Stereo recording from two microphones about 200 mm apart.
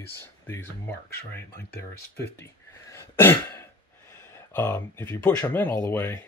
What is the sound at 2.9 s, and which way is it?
Throat clearing, 10° left (ahead or behind).